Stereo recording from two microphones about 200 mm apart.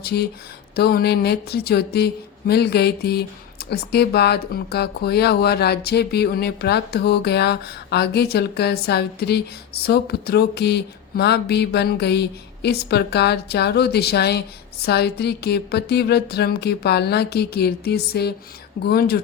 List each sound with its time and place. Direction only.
0.0 s speech: 55° left (ahead or behind)
9.8 s a sound: 55° left (ahead or behind)
14.8 s speech: 55° left (ahead or behind)